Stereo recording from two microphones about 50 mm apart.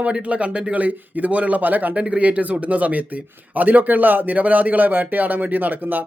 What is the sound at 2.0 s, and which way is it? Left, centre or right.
Speech, right.